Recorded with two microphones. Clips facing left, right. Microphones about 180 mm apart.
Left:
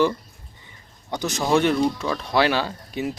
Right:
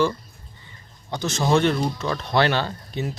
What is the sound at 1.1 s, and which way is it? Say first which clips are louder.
Speech: even; 15° left (ahead or behind).